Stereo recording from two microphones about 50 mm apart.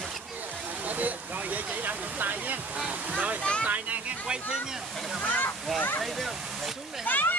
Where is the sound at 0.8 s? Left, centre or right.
Right.